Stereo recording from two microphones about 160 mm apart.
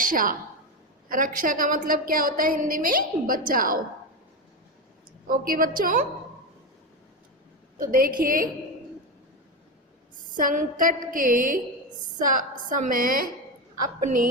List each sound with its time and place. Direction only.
0.0 s a woman's voice: 60° right (ahead or behind)
5.3 s a woman's voice: 60° right (ahead or behind)
7.8 s a woman's voice: 60° right (ahead or behind)
10.3 s a woman's voice: 55° right (ahead or behind)